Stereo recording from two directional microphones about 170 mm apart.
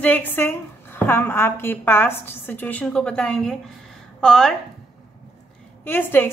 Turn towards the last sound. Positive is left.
turn(degrees=10)  # may be behind; listen again after turning